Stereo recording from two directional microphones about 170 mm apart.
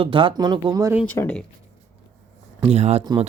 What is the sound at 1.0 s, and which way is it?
Speech, 10° left (ahead or behind).